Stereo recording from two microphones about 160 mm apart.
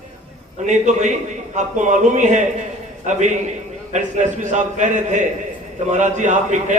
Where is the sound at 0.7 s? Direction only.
50° right (ahead or behind).